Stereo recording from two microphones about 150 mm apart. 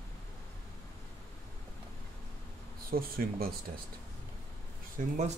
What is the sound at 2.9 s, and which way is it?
Speech, 80° right.